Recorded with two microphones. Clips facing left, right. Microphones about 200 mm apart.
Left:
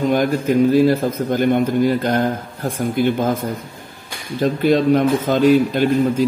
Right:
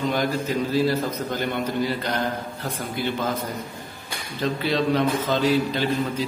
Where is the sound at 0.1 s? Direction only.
50° left (ahead or behind).